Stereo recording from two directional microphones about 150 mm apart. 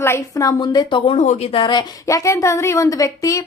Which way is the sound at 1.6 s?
30° left (ahead or behind).